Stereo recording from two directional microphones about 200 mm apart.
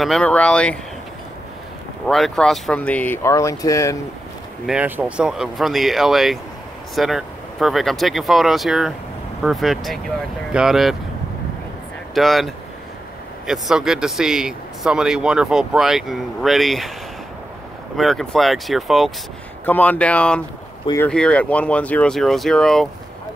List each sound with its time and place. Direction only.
0.0 s speech: 5° left (ahead or behind)
2.0 s speech: centre (ahead or behind)
4.6 s speech: 5° right (ahead or behind)
12.1 s speech: centre (ahead or behind)
17.9 s speech: centre (ahead or behind); by 21.1 s 15° left (ahead or behind)
21.1 s speech: 5° left (ahead or behind)